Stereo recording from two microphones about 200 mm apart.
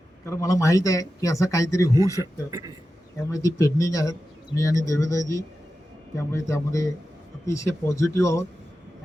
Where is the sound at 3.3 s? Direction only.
15° left (ahead or behind).